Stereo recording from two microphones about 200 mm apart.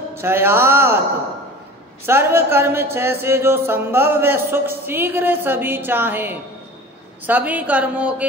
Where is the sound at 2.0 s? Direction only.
10° right (ahead or behind).